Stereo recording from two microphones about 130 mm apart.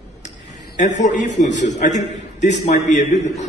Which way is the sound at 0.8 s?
65° left (ahead or behind).